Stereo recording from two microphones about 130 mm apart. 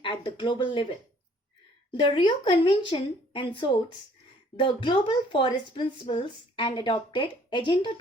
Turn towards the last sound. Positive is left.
turn(degrees=40)  # may be behind; listen again after turning